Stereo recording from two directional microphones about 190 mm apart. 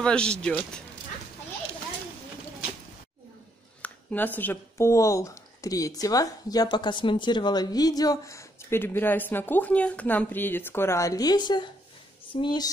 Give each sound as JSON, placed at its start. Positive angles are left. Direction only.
{"t": 0.0, "sound": "speech", "side_deg": 5}
{"t": 3.8, "sound": "speech", "side_deg": 10}